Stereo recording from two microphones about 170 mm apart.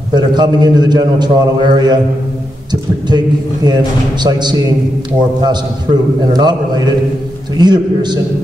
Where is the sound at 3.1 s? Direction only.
25° right (ahead or behind).